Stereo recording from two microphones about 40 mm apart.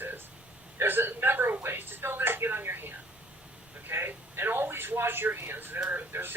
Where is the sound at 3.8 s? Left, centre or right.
Right.